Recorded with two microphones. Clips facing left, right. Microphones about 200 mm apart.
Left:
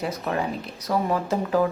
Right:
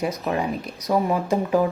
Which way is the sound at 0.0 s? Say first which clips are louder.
Right 2 dB; 15° right (ahead or behind).